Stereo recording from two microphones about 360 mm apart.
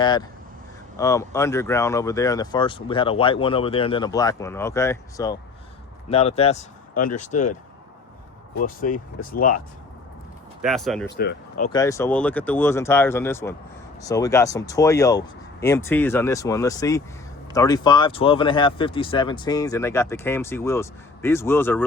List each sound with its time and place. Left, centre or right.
0.0 s speech: centre
8.6 s speech: left
10.6 s speech: centre
11.2 s speech: left
11.7 s speech: centre